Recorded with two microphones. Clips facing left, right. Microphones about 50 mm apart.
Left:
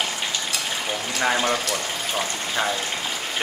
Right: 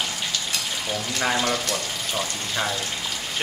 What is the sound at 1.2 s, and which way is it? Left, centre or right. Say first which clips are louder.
Speech: left 2 dB; centre.